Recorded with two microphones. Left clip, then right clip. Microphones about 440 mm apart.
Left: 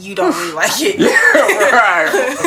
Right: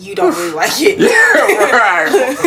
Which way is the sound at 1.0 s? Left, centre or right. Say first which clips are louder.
Even; left.